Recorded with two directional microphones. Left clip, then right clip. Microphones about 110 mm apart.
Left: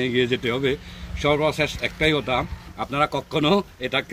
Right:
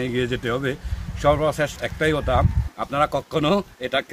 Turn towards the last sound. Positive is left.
turn(degrees=-45)  # may be behind; listen again after turning